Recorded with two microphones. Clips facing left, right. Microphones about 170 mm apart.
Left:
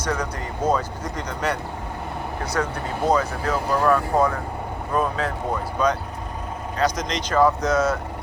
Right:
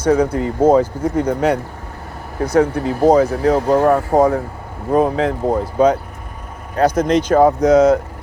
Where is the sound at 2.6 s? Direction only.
65° right (ahead or behind).